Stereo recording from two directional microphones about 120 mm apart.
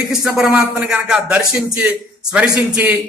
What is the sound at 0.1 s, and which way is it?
A man's voice, 5° right (ahead or behind).